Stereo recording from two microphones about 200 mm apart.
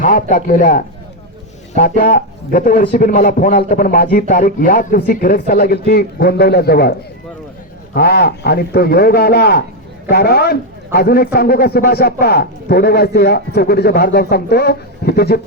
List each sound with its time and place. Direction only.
0.0 s a man's voice: 40° left (ahead or behind)
7.9 s a man's voice: 50° left (ahead or behind)